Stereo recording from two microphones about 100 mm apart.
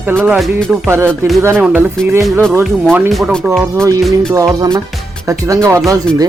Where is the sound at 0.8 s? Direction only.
25° right (ahead or behind).